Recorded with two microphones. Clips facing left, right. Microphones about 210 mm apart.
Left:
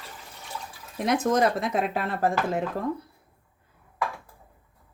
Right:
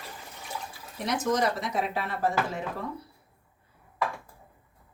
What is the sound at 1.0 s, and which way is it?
Speech, 55° left (ahead or behind).